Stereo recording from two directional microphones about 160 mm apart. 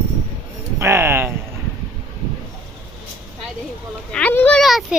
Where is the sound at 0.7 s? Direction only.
15° right (ahead or behind).